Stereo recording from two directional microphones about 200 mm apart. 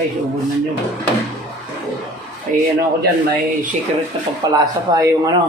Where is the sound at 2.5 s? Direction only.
40° right (ahead or behind).